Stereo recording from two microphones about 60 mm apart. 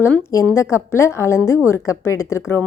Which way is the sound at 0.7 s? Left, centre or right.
Left.